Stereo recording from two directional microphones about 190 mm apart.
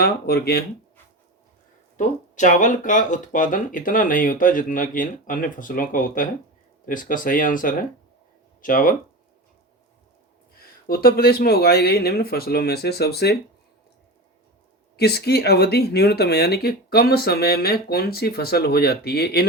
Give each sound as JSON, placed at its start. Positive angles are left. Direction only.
{"t": 0.0, "sound": "speech", "side_deg": 55}
{"t": 2.0, "sound": "speech", "side_deg": 40}
{"t": 10.8, "sound": "speech", "side_deg": 55}
{"t": 14.9, "sound": "speech", "side_deg": 60}